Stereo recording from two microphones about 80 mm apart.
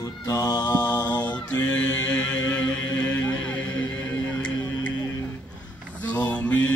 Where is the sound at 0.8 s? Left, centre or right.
Left.